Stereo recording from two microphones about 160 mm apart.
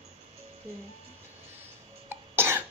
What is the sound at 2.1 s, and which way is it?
Cough, 15° right (ahead or behind).